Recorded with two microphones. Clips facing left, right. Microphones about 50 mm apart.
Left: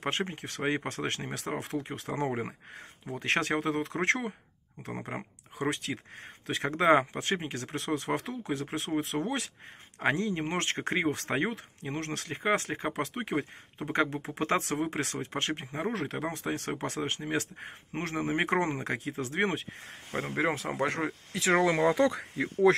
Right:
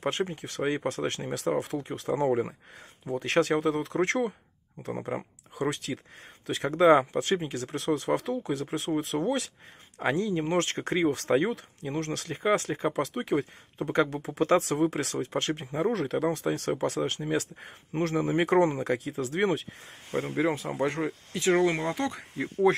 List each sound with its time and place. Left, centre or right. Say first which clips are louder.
0.0 s speech: right 3 dB; left
9.1 s speech: right 3 dB; centre
10.0 s speech: right 2 dB; left
20.2 s speech: right 2 dB; left
22.4 s speech: even; left